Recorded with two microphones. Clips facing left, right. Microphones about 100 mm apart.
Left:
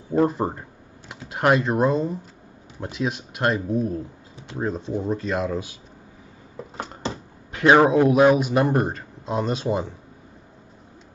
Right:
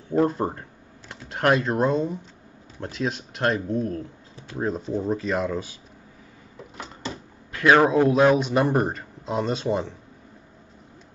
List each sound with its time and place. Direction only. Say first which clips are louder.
0.1 s speech: left 1 dB; 10° left (ahead or behind)
7.0 s a sound: left 2 dB; 25° left (ahead or behind)
8.1 s speech: left 2 dB; 5° left (ahead or behind)